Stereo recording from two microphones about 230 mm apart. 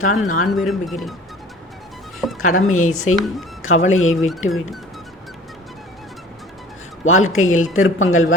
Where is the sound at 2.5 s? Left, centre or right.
Left.